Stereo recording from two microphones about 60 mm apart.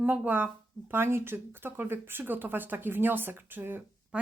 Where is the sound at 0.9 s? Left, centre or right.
Right.